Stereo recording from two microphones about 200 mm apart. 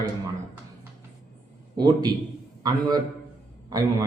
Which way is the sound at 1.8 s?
20° right (ahead or behind).